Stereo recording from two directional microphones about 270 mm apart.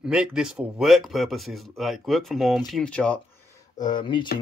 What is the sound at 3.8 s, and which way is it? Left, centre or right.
Speech, centre.